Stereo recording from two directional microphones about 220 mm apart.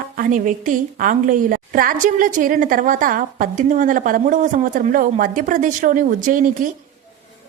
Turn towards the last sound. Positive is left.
turn(degrees=-35)  # may be behind; listen again after turning